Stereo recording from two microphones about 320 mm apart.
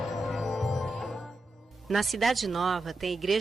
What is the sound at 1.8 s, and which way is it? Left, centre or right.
Speech, centre.